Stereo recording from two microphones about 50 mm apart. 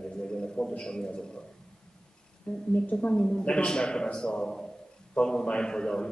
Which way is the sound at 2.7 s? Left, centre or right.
Left.